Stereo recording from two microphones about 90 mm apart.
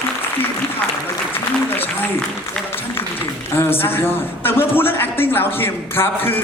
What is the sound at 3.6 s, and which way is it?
A man's voice, 25° left (ahead or behind).